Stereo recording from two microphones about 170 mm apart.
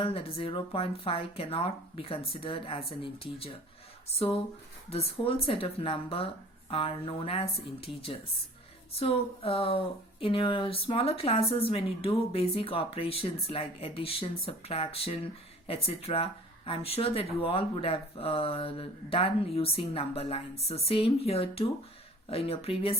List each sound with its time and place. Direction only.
0.0 s speech: 35° left (ahead or behind)
8.9 s speech: 35° left (ahead or behind)